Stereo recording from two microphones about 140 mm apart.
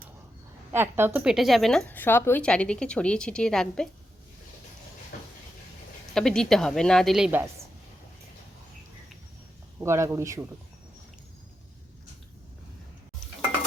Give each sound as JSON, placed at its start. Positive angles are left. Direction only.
{"t": 0.7, "sound": "a woman's voice", "side_deg": -15}
{"t": 1.2, "sound": "speech", "side_deg": -5}
{"t": 1.9, "sound": "a woman's voice", "side_deg": 15}
{"t": 6.1, "sound": "speech", "side_deg": 5}
{"t": 9.8, "sound": "speech", "side_deg": -20}